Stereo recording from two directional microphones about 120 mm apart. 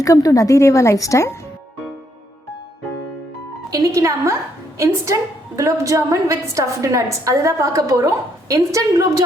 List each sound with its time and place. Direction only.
0.0 s a woman's voice: 30° left (ahead or behind)
3.7 s a woman's voice: 30° right (ahead or behind)